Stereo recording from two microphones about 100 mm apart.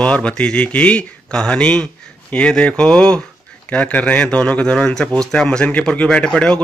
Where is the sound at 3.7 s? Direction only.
15° left (ahead or behind).